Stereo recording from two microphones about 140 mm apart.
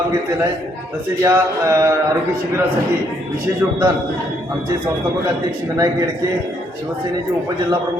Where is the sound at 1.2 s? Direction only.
20° right (ahead or behind).